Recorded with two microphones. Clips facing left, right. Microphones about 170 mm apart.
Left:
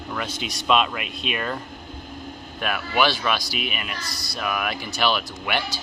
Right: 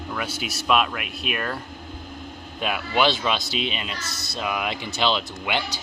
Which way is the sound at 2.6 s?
20° right (ahead or behind).